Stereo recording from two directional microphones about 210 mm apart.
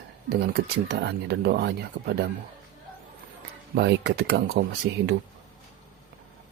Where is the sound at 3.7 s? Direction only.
50° right (ahead or behind).